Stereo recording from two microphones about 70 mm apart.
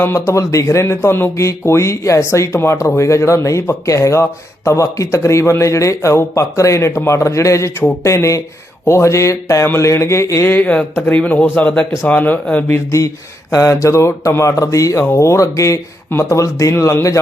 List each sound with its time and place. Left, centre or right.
0.0 s speech: left
10.4 s a man's voice: left
12.7 s speech: left